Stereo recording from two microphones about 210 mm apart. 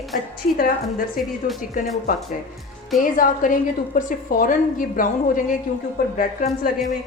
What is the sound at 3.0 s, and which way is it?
A woman's voice, 40° left (ahead or behind).